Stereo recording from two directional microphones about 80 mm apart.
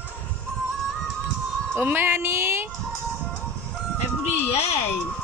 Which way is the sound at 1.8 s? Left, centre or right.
Right.